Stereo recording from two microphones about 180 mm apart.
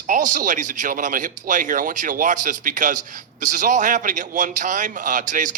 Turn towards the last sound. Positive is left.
turn(degrees=-45)  # may be behind; listen again after turning